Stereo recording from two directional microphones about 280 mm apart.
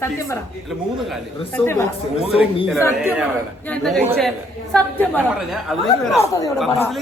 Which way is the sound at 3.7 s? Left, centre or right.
Centre.